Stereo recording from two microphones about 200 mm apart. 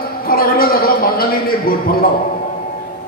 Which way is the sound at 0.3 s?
45° left (ahead or behind).